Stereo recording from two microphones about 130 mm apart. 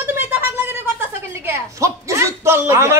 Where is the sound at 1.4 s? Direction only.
20° right (ahead or behind).